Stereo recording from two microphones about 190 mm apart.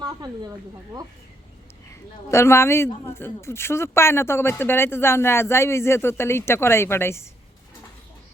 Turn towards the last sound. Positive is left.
turn(degrees=15)  # may be behind; listen again after turning